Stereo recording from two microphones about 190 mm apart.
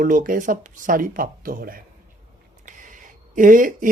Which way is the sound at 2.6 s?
45° right (ahead or behind).